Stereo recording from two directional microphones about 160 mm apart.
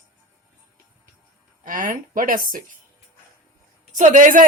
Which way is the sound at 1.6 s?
55° right (ahead or behind).